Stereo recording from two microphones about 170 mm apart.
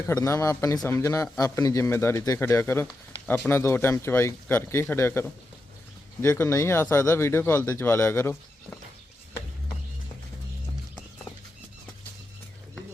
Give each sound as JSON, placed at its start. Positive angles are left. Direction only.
{"t": 0.1, "sound": "speech", "side_deg": 20}